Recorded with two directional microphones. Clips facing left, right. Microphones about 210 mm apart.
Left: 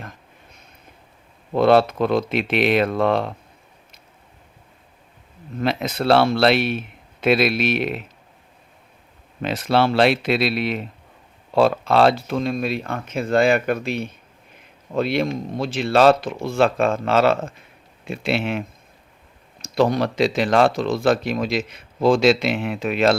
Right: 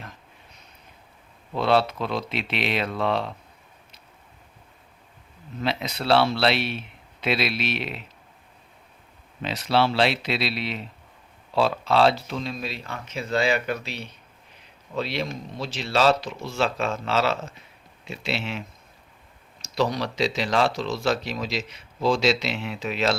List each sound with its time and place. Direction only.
1.5 s speech: 50° left (ahead or behind)
5.5 s speech: 50° left (ahead or behind)
9.4 s speech: 50° left (ahead or behind)
19.6 s speech: 55° left (ahead or behind)